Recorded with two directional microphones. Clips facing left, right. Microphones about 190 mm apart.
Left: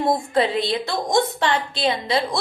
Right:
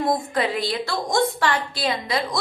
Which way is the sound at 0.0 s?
25° left (ahead or behind).